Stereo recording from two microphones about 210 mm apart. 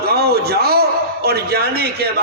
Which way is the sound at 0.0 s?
50° right (ahead or behind).